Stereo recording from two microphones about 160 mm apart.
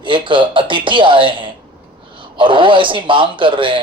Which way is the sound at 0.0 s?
30° right (ahead or behind).